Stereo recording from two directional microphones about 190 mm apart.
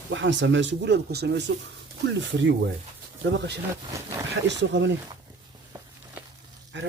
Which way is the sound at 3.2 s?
70° right (ahead or behind).